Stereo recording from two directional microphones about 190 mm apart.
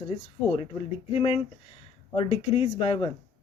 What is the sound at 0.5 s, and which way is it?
Speech, 30° left (ahead or behind).